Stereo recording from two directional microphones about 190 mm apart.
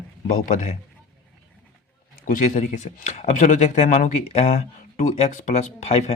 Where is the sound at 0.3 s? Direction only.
45° left (ahead or behind).